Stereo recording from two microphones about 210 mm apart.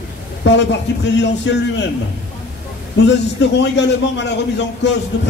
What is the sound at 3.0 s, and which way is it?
A man's voice, 55° left (ahead or behind).